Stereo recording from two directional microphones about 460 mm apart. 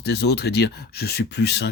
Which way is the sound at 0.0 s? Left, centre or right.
Left.